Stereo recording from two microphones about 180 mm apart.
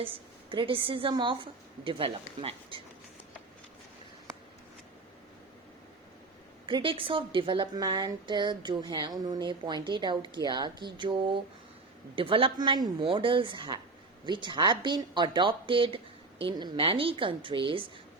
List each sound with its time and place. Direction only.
0.0 s a woman's voice: 30° right (ahead or behind)
6.7 s a woman's voice: 30° right (ahead or behind)